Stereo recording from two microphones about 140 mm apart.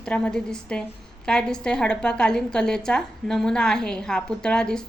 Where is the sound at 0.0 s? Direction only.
5° left (ahead or behind).